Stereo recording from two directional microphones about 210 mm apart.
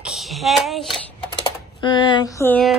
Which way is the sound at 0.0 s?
Centre (ahead or behind).